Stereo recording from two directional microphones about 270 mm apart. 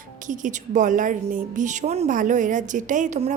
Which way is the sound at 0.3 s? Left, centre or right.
Right.